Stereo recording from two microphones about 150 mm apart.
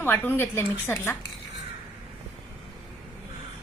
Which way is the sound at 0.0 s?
15° left (ahead or behind).